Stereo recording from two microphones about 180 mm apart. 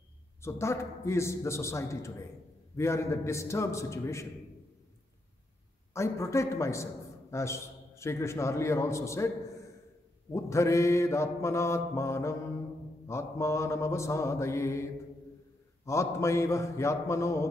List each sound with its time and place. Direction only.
0.4 s a man's voice: 15° left (ahead or behind)
5.9 s a man's voice: 15° left (ahead or behind)
10.3 s a man's voice: 15° left (ahead or behind)